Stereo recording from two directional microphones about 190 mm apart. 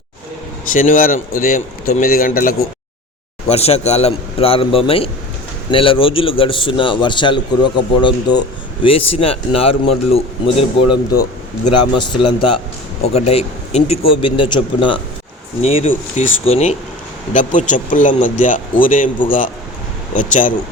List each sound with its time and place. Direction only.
0.7 s speech: 45° left (ahead or behind)
3.5 s a man's voice: 35° left (ahead or behind)
20.1 s speech: 40° left (ahead or behind)